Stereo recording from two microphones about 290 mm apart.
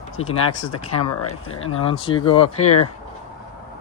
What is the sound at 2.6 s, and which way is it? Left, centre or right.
Speech, left.